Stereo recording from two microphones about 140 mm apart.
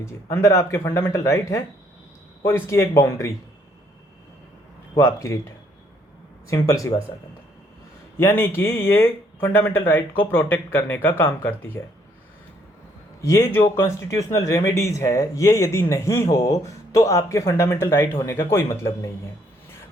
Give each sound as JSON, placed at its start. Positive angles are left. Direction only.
{"t": 0.0, "sound": "speech", "side_deg": 20}
{"t": 4.9, "sound": "speech", "side_deg": 20}
{"t": 6.5, "sound": "speech", "side_deg": 25}
{"t": 8.2, "sound": "speech", "side_deg": 15}
{"t": 13.2, "sound": "speech", "side_deg": 25}